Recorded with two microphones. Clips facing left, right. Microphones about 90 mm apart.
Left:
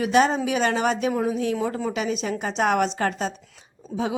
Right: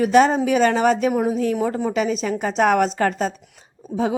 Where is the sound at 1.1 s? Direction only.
20° right (ahead or behind).